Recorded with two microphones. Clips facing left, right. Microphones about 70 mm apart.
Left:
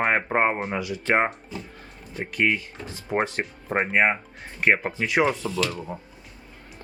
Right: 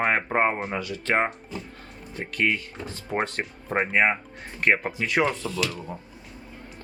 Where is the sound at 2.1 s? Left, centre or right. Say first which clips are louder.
Left 2 dB; centre.